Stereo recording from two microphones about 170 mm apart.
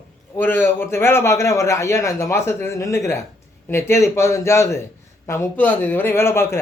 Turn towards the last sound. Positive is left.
turn(degrees=15)  # may be behind; listen again after turning